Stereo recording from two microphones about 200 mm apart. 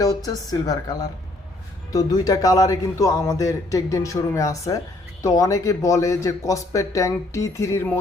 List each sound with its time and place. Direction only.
0.6 s a woman's voice: 20° left (ahead or behind)